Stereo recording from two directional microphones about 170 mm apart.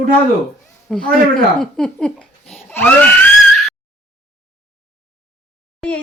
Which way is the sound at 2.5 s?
15° left (ahead or behind).